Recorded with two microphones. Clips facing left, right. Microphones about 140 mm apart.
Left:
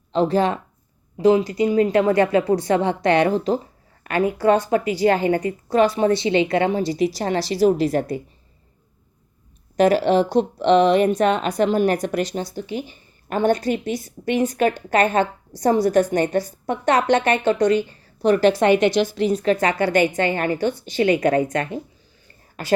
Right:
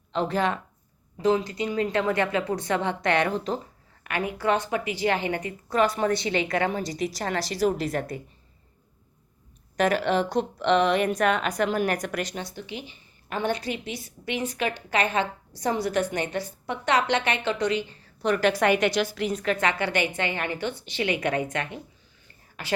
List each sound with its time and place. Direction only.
0.1 s speech: 35° left (ahead or behind)
9.7 s a woman's voice: 35° left (ahead or behind)